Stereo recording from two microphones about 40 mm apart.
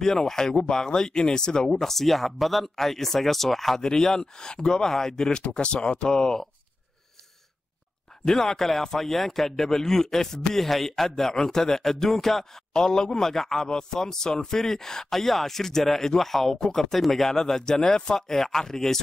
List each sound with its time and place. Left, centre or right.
0.0 s speech: centre
8.3 s speech: centre